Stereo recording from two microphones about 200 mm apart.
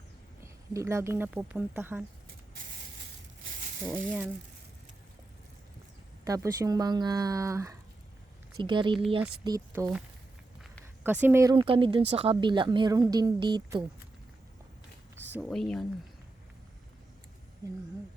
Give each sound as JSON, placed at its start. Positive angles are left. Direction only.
{"t": 0.4, "sound": "speech", "side_deg": -15}
{"t": 6.2, "sound": "speech", "side_deg": -15}
{"t": 10.6, "sound": "speech", "side_deg": -10}
{"t": 15.3, "sound": "speech", "side_deg": 0}